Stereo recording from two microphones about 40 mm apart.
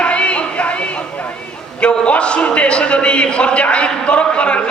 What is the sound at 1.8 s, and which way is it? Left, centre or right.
A man's voice, left.